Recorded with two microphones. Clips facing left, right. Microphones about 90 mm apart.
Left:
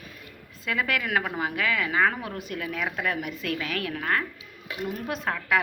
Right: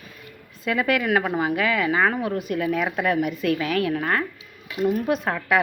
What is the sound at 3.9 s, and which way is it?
Speech, 30° right (ahead or behind).